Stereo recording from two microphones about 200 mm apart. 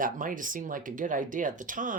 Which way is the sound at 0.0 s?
40° right (ahead or behind).